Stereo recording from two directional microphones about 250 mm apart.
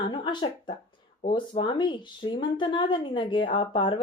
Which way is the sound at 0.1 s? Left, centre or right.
Centre.